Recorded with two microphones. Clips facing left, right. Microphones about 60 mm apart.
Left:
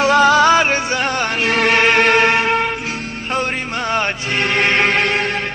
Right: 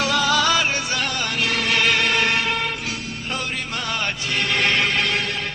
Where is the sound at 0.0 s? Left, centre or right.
Left.